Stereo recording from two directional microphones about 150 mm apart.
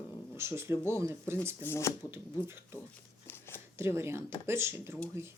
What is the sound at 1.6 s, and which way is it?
Speech, 20° left (ahead or behind).